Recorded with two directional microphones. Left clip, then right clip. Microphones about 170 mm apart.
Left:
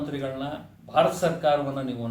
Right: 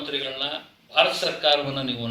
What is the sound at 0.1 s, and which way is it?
A man's voice, 15° left (ahead or behind).